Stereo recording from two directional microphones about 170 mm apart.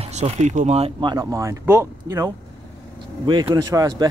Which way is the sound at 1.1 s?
20° right (ahead or behind).